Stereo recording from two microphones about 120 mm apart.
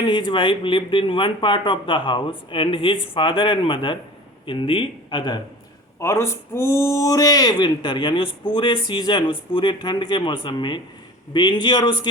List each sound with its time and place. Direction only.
0.0 s speech: 45° left (ahead or behind)
6.0 s a man's voice: 25° left (ahead or behind); by 11.9 s 40° left (ahead or behind)